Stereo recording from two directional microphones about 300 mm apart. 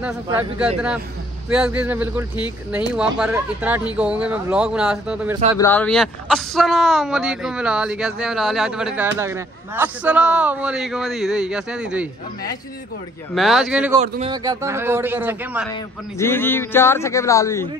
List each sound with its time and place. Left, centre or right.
0.0 s speech: centre
13.3 s speech: centre
14.0 s a man's voice: right
14.3 s a man's voice: centre
15.7 s a man's voice: centre